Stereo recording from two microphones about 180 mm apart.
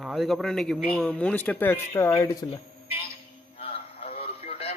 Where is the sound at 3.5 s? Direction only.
30° left (ahead or behind).